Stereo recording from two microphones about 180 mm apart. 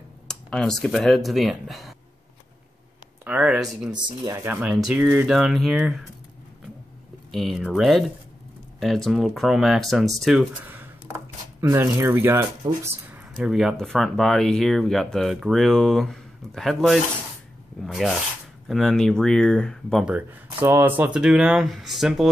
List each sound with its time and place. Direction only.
0.3 s speech: 5° left (ahead or behind)
3.3 s speech: 5° right (ahead or behind)
7.2 s speech: centre (ahead or behind)
11.6 s speech: 20° right (ahead or behind); by 22.3 s 5° right (ahead or behind)